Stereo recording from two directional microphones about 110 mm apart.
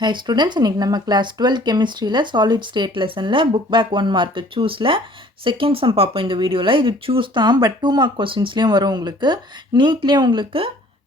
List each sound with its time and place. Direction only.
0.0 s speech: 45° right (ahead or behind)
8.1 s speech: 50° right (ahead or behind)